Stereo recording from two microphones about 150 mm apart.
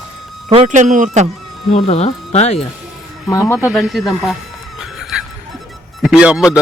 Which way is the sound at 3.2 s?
20° left (ahead or behind).